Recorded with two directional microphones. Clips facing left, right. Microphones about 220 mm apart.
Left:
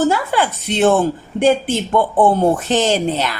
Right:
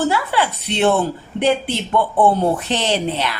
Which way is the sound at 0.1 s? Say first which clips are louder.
Left 2 dB; 45° left (ahead or behind).